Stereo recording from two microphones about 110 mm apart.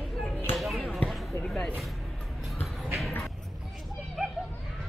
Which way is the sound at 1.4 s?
10° left (ahead or behind).